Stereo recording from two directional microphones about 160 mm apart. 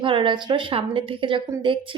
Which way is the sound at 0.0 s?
30° right (ahead or behind).